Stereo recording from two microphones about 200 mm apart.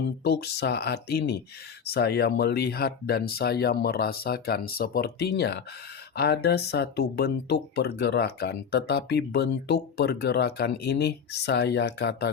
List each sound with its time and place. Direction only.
0.3 s speech: 55° left (ahead or behind)